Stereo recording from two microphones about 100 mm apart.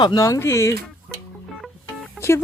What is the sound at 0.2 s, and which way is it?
Speech, 30° left (ahead or behind).